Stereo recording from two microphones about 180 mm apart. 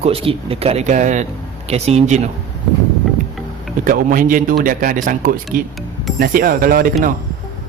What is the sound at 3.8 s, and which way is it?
Speech, 50° right (ahead or behind).